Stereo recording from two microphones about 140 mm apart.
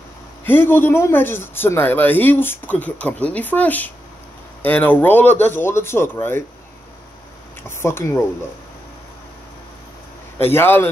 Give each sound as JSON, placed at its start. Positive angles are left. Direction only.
{"t": 0.5, "sound": "speech", "side_deg": 15}
{"t": 7.6, "sound": "speech", "side_deg": 15}
{"t": 10.4, "sound": "speech", "side_deg": 15}